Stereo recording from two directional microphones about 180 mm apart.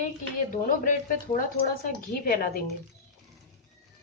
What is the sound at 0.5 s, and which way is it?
A woman's voice, 45° left (ahead or behind).